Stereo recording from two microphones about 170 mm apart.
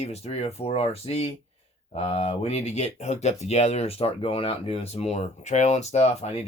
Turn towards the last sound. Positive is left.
turn(degrees=40)  # may be behind; listen again after turning